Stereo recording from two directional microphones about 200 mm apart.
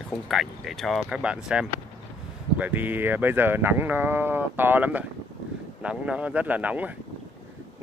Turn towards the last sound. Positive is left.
turn(degrees=-5)  # may be behind; listen again after turning